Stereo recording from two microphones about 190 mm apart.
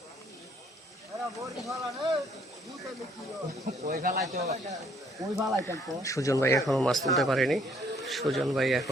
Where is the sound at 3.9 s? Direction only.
55° right (ahead or behind).